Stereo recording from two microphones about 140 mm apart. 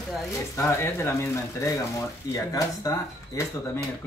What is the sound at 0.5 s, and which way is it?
Speech, 15° left (ahead or behind).